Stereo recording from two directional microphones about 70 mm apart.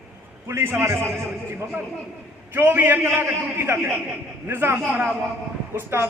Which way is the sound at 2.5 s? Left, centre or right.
Right.